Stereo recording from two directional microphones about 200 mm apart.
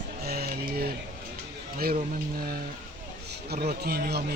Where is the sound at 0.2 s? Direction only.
50° right (ahead or behind).